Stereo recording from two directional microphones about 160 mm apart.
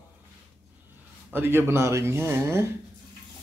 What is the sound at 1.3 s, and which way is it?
Speech, 15° right (ahead or behind).